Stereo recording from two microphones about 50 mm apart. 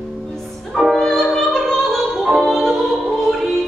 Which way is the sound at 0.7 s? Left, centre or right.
Centre.